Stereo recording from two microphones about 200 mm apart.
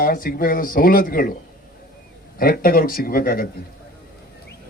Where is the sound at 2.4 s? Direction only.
45° left (ahead or behind).